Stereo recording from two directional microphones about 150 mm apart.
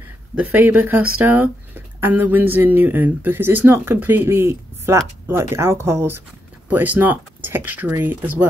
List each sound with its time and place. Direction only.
0.4 s speech: 10° right (ahead or behind)